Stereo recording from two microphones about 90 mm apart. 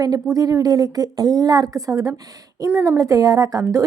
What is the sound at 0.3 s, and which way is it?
A woman's voice, 40° right (ahead or behind).